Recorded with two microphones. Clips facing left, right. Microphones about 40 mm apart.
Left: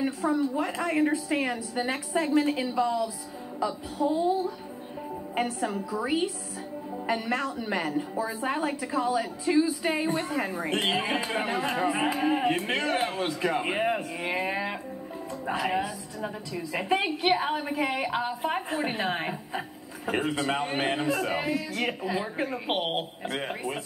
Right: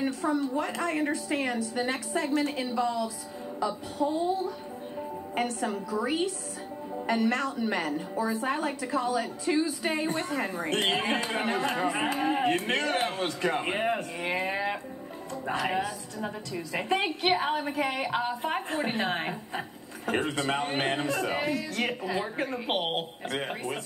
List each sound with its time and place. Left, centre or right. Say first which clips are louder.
0.2 s a woman's voice: left 2 dB; centre
5.3 s a woman's voice: left 1 dB; centre
8.3 s a woman's voice: even; centre